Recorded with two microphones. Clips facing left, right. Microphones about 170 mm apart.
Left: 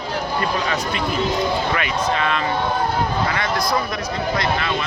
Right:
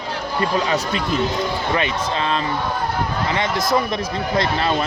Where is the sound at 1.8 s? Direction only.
30° right (ahead or behind).